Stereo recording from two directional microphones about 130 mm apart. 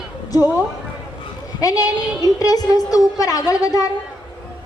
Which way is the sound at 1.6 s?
30° left (ahead or behind).